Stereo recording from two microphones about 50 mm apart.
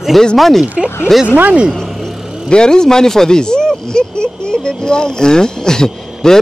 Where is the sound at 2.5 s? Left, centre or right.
Centre.